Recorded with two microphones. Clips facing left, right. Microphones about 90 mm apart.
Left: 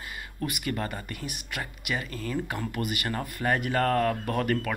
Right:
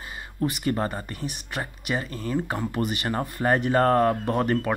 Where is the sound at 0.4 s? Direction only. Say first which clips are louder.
Right 6 dB; 30° right (ahead or behind).